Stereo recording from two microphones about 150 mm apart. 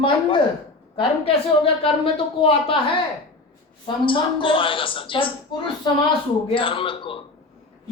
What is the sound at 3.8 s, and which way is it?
Speech, 35° left (ahead or behind).